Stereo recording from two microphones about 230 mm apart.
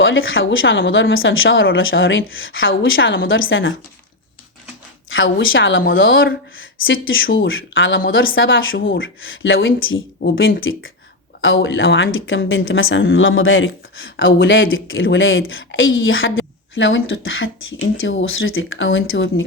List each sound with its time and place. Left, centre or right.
0.0 s speech: left
5.0 s a woman's voice: left